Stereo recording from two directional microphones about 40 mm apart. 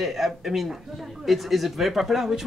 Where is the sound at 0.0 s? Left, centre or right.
Centre.